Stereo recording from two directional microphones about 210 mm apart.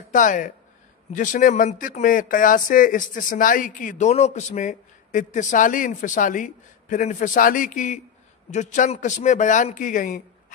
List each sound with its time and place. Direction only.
0.1 s speech: 40° left (ahead or behind)